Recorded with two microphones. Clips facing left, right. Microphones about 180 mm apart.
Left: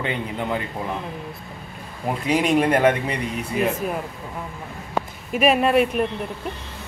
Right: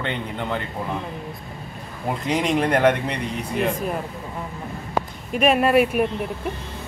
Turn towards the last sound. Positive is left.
turn(degrees=-5)  # may be behind; listen again after turning